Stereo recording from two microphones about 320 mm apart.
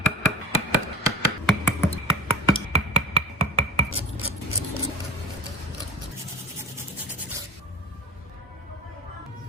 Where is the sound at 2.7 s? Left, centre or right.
Centre.